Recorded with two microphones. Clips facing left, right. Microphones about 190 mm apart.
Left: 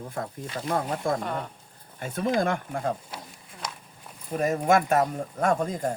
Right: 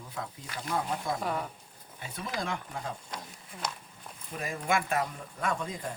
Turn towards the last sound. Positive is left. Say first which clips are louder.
# left 8 dB
turn(degrees=45)  # may be behind; listen again after turning